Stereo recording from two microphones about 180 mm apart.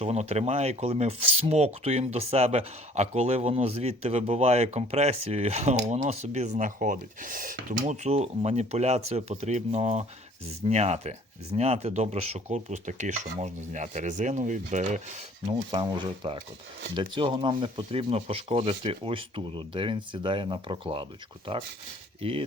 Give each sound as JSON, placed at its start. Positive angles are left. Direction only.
{"t": 0.0, "sound": "speech", "side_deg": -35}
{"t": 15.4, "sound": "speech", "side_deg": -25}